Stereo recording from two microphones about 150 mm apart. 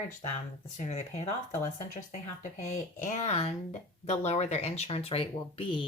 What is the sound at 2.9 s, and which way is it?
Speech, 55° left (ahead or behind).